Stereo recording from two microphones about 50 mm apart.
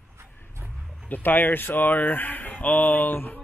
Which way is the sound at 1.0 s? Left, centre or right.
Left.